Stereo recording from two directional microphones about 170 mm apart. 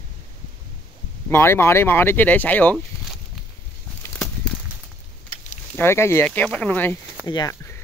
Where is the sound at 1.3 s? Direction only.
15° left (ahead or behind).